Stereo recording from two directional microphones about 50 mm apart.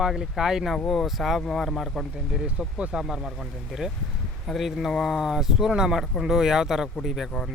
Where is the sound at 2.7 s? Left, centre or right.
Right.